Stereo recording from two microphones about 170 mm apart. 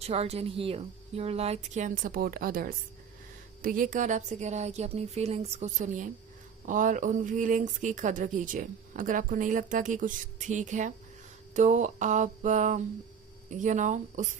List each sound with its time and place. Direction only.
0.0 s speech: 35° right (ahead or behind)